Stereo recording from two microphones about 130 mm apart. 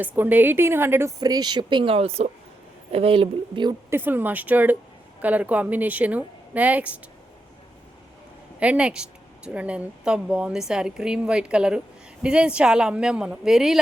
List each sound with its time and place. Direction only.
0.0 s speech: 15° right (ahead or behind)
1.2 s a woman's voice: 30° right (ahead or behind)
3.8 s speech: 15° right (ahead or behind)
8.5 s speech: 10° right (ahead or behind)